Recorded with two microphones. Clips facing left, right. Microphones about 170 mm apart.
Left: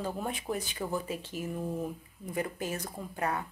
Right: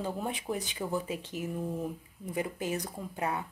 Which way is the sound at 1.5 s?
Centre (ahead or behind).